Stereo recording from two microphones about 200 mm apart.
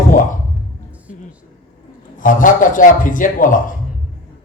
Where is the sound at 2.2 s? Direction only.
40° left (ahead or behind).